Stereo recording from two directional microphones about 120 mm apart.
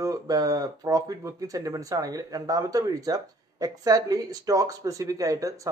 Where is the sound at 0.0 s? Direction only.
30° right (ahead or behind).